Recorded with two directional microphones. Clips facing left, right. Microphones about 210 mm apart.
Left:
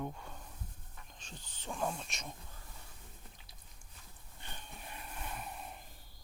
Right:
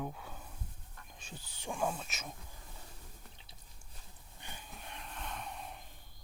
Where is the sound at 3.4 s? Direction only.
30° right (ahead or behind).